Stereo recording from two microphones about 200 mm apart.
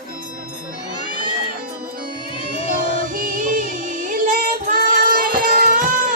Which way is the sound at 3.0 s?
40° right (ahead or behind).